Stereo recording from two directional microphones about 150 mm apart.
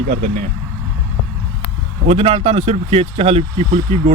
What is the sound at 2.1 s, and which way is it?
Speech, 40° right (ahead or behind).